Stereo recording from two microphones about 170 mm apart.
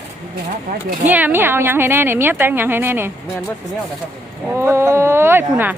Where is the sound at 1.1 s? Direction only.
10° right (ahead or behind).